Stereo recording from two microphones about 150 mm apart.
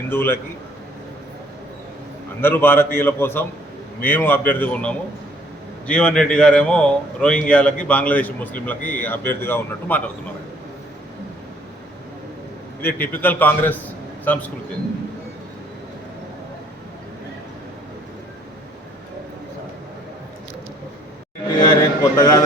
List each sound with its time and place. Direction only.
0.1 s a man's voice: 15° left (ahead or behind)
2.4 s a man's voice: 15° left (ahead or behind)
12.8 s a man's voice: 10° left (ahead or behind)
21.6 s a sound: 20° left (ahead or behind)